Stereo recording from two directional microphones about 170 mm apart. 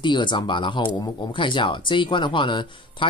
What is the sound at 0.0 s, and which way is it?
Speech, 25° left (ahead or behind).